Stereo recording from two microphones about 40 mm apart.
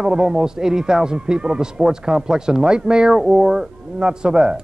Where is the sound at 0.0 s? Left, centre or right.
Centre.